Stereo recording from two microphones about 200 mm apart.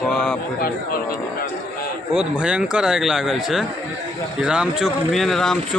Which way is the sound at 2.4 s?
5° right (ahead or behind).